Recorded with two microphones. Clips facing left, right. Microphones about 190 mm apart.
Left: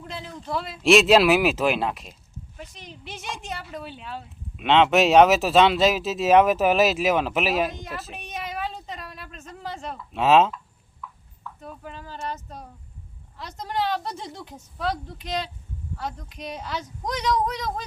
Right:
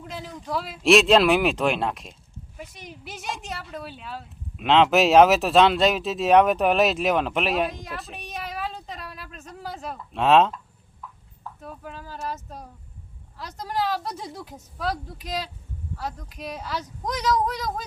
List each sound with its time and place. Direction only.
0.0 s a woman's voice: 5° right (ahead or behind)
2.6 s speech: 10° right (ahead or behind)
11.0 s a sound: 40° right (ahead or behind)
11.6 s a woman's voice: centre (ahead or behind)